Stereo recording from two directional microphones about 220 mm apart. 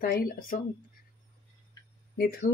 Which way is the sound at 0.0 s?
40° left (ahead or behind).